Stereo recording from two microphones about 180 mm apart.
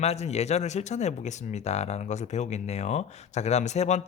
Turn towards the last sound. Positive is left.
turn(degrees=40)  # may be behind; listen again after turning